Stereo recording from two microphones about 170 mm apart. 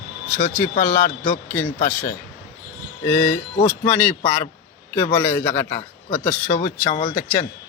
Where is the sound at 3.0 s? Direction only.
10° left (ahead or behind).